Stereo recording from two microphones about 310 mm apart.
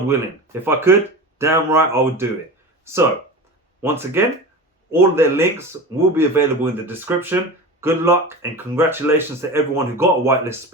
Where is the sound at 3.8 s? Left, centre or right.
Centre.